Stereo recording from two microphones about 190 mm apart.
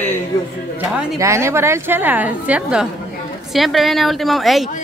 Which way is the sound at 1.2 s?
15° right (ahead or behind).